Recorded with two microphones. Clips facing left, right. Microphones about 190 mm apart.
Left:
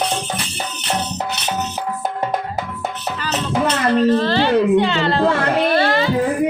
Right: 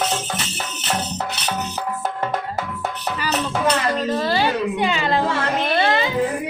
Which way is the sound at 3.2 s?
10° right (ahead or behind).